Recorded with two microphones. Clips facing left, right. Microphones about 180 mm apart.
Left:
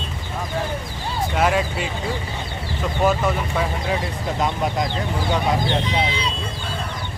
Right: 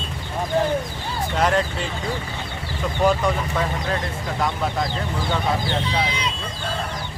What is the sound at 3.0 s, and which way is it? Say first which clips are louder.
Speech: even; 5° left (ahead or behind).